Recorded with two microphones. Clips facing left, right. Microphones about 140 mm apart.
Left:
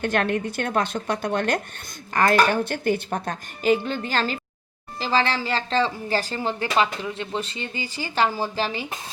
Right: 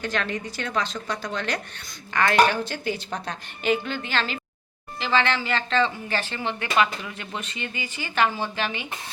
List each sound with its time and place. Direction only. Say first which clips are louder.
0.0 s a woman's voice: left 5 dB; 55° left (ahead or behind)
3.6 s speech: left 4 dB; 35° left (ahead or behind)